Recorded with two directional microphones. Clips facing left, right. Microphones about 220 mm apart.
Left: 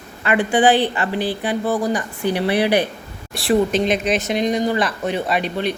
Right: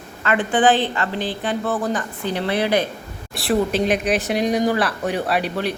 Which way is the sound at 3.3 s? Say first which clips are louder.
Left 2 dB; centre (ahead or behind).